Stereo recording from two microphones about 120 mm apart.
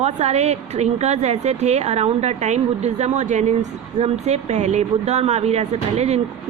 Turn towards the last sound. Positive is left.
turn(degrees=-65)  # may be behind; listen again after turning